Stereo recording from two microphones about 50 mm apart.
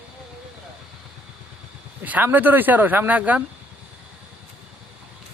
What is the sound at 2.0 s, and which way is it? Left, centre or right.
Speech, right.